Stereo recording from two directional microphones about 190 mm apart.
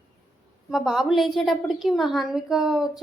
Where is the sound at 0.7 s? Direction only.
Centre (ahead or behind).